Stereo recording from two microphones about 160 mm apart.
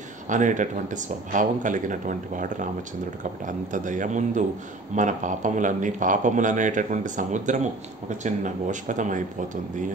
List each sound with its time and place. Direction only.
0.3 s speech: 50° right (ahead or behind)